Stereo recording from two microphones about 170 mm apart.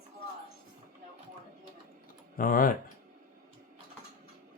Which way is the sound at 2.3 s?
55° left (ahead or behind).